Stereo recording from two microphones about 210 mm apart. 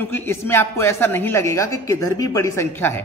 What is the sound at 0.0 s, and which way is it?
A man's voice, 10° left (ahead or behind).